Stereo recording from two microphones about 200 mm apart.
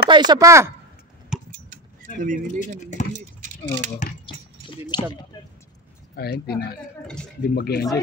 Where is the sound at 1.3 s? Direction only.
5° right (ahead or behind).